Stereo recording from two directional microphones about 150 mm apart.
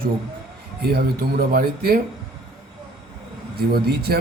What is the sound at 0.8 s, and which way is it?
Speech, 90° right.